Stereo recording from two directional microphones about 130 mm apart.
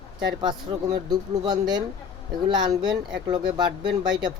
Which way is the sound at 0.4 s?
35° right (ahead or behind).